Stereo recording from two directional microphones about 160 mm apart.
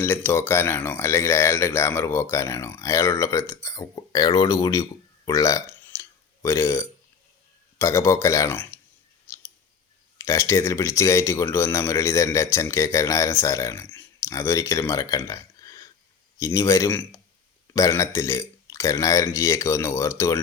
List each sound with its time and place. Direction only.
0.0 s speech: 15° left (ahead or behind)
9.2 s clicking: 20° left (ahead or behind)
10.2 s speech: 20° left (ahead or behind)